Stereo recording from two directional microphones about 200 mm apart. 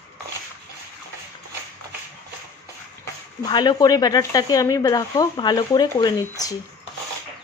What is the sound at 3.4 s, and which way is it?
Speech, 20° left (ahead or behind).